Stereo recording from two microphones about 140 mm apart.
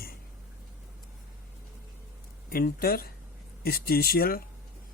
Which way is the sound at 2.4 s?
90° left.